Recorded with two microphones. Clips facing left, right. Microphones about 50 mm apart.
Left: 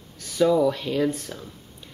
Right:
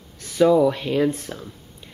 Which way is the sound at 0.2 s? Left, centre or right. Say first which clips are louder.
Right 4 dB; centre.